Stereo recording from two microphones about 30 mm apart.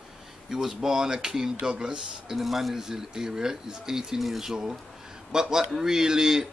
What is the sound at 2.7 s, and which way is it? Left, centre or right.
Speech, centre.